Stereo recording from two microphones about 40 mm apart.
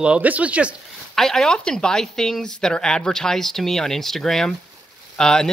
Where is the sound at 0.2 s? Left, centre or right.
Right.